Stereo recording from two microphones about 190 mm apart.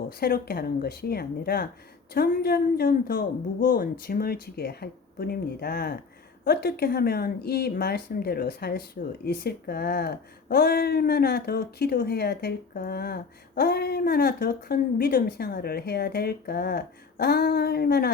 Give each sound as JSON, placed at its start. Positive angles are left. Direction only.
{"t": 0.1, "sound": "a woman's voice", "side_deg": 55}